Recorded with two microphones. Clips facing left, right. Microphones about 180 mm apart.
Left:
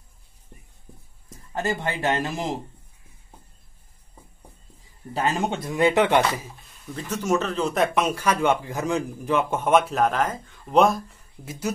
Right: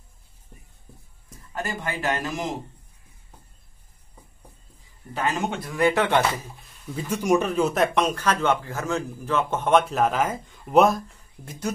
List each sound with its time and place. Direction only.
1.5 s speech: 25° left (ahead or behind)
5.1 s speech: 30° left (ahead or behind); by 6.5 s 15° left (ahead or behind)
6.9 s speech: 10° right (ahead or behind)